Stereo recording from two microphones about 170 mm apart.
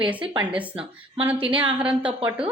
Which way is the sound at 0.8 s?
30° right (ahead or behind).